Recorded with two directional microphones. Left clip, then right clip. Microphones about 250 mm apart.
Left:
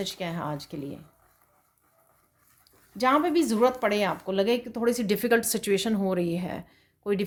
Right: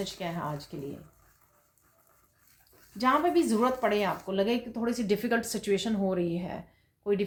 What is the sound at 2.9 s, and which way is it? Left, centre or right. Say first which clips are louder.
Speech: left 2 dB; left.